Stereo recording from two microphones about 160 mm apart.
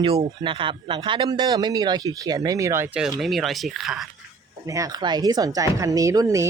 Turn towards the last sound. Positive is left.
turn(degrees=-20)  # may be behind; listen again after turning